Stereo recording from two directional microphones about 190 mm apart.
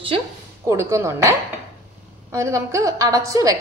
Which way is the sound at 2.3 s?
15° right (ahead or behind).